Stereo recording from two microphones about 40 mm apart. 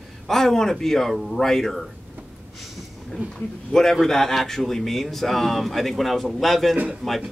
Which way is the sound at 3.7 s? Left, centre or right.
Centre.